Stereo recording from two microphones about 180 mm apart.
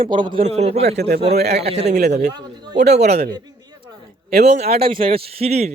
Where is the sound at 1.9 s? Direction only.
65° right (ahead or behind).